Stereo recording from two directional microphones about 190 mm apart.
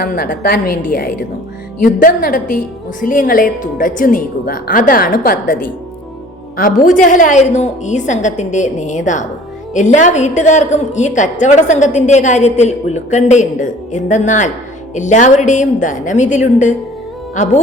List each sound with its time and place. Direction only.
0.0 s a woman's voice: 55° left (ahead or behind)